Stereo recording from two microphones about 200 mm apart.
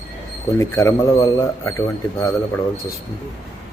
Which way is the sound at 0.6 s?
15° left (ahead or behind).